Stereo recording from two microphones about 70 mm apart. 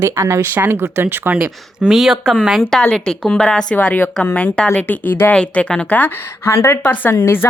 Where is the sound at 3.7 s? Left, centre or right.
Left.